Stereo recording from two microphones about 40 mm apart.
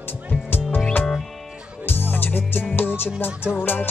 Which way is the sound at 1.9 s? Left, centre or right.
Left.